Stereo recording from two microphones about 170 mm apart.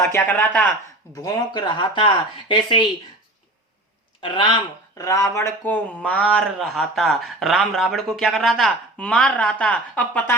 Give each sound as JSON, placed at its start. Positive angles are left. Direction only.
{"t": 0.0, "sound": "a man's voice", "side_deg": 15}
{"t": 1.1, "sound": "speech", "side_deg": 20}
{"t": 4.2, "sound": "speech", "side_deg": 30}
{"t": 4.9, "sound": "a man's voice", "side_deg": 20}